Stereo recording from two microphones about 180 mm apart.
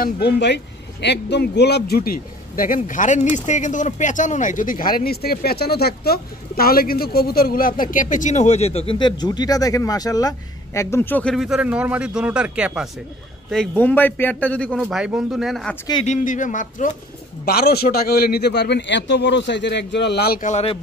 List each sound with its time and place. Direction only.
0.0 s a man's voice: 70° left (ahead or behind); by 11.3 s 10° left (ahead or behind)
11.3 s a man's voice: 5° right (ahead or behind)
13.5 s a man's voice: 5° left (ahead or behind)
14.8 s a man's voice: 5° right (ahead or behind)
15.9 s speech: 35° left (ahead or behind)
16.3 s speech: 45° left (ahead or behind)
17.5 s a man's voice: 60° left (ahead or behind)
20.4 s speech: 35° left (ahead or behind)